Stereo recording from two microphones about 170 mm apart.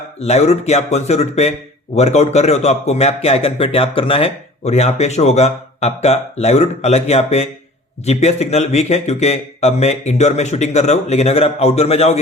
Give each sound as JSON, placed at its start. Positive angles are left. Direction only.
{"t": 0.2, "sound": "a man's voice", "side_deg": 40}